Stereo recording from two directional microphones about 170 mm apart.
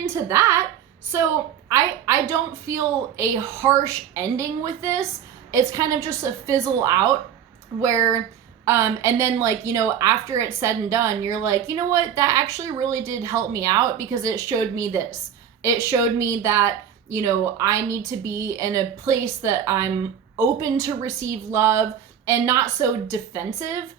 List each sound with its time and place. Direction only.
0.1 s a woman's voice: 15° right (ahead or behind)
1.7 s a woman's voice: 15° right (ahead or behind)